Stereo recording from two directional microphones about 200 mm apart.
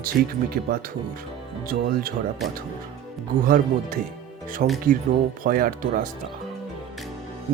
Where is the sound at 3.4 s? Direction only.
45° right (ahead or behind).